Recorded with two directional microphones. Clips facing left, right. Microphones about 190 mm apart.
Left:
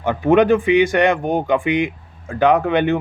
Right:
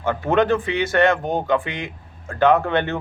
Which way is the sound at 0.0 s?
15° left (ahead or behind).